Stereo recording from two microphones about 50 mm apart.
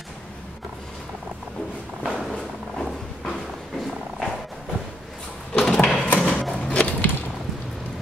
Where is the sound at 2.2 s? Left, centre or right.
Centre.